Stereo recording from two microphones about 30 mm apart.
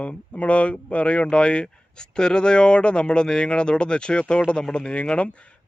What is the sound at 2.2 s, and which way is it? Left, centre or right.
Speech, left.